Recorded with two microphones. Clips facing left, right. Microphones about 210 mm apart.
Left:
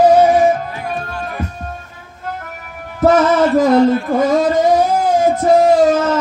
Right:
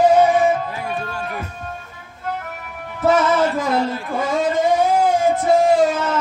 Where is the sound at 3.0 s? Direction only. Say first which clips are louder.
Left 5 dB; 40° left (ahead or behind).